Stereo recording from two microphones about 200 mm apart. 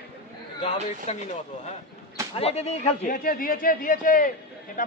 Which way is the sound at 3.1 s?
45° left (ahead or behind).